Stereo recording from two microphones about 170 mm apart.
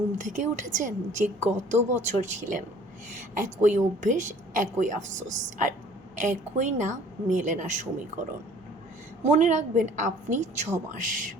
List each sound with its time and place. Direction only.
0.2 s a woman's voice: 45° right (ahead or behind)
9.2 s a woman's voice: 45° right (ahead or behind)